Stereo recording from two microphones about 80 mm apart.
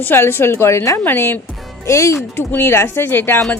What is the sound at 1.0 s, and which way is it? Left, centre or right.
Speech, left.